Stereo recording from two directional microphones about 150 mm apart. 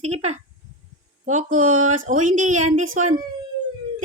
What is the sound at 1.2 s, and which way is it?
Music, 55° right (ahead or behind).